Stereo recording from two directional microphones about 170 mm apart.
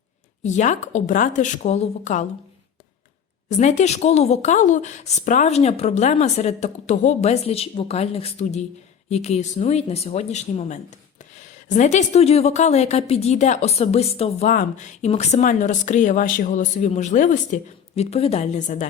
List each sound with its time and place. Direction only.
0.4 s speech: 45° left (ahead or behind)
3.5 s a woman's voice: 45° left (ahead or behind)
14.4 s speech: 50° left (ahead or behind)